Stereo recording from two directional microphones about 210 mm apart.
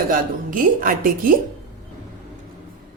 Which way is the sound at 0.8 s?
40° right (ahead or behind).